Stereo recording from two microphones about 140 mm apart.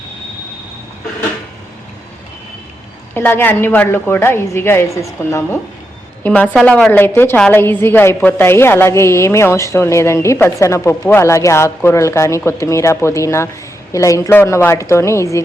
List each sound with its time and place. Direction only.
3.2 s a woman's voice: 15° left (ahead or behind)